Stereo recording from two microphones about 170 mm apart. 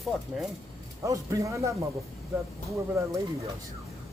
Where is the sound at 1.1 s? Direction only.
20° right (ahead or behind).